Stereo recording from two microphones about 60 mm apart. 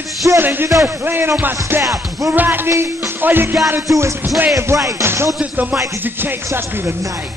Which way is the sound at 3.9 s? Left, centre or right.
Right.